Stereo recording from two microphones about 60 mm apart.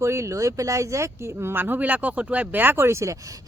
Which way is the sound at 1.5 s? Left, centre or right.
Right.